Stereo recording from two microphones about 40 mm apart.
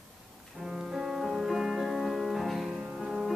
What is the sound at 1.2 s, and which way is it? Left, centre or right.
Music, centre.